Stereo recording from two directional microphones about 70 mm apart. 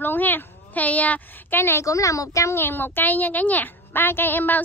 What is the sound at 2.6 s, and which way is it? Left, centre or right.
A woman's voice, left.